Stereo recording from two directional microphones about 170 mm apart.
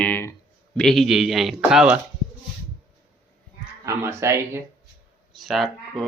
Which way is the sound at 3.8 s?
15° right (ahead or behind).